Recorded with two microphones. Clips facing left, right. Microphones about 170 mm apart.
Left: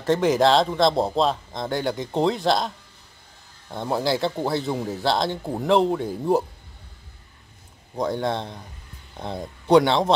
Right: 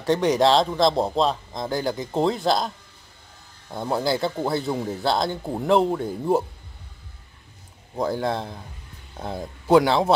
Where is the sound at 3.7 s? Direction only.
Centre (ahead or behind).